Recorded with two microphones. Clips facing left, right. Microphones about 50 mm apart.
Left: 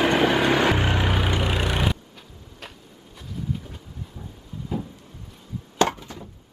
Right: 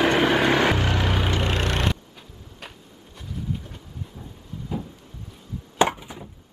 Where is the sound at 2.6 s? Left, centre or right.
Centre.